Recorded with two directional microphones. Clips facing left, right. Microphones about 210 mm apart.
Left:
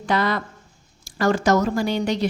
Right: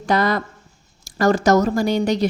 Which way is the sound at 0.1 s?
40° right (ahead or behind).